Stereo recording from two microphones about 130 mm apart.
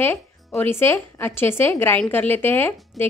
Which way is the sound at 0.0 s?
15° left (ahead or behind).